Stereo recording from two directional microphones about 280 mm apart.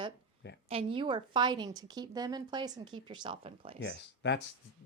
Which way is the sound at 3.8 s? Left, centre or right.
Left.